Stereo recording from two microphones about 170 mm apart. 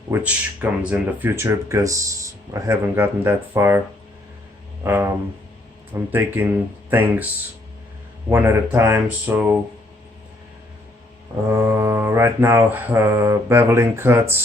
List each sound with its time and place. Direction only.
0.1 s speech: 10° right (ahead or behind)
8.3 s speech: 10° right (ahead or behind)
11.4 s speech: 15° right (ahead or behind)